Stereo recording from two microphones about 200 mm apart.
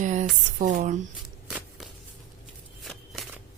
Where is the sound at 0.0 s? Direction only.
35° right (ahead or behind).